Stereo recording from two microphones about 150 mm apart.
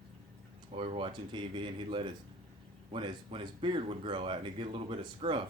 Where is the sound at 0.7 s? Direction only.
40° right (ahead or behind).